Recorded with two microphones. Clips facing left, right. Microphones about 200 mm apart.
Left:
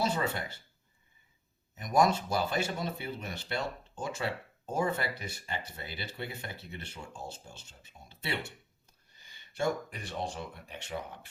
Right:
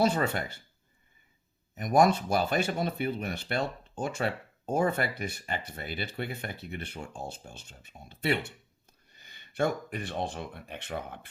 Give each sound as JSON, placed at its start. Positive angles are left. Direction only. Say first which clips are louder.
{"t": 0.0, "sound": "speech", "louder": "right 5 dB", "side_deg": -55}
{"t": 1.7, "sound": "speech", "louder": "right 3 dB", "side_deg": -60}